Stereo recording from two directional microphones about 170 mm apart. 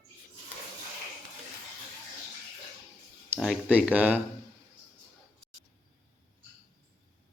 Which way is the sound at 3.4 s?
5° right (ahead or behind).